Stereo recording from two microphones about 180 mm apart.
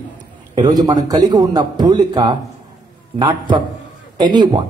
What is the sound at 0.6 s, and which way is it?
A man's voice, 20° right (ahead or behind).